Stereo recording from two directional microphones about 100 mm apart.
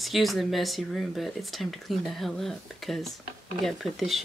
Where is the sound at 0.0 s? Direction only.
Centre (ahead or behind).